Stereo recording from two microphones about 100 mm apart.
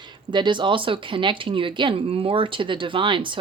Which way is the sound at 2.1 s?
65° right (ahead or behind).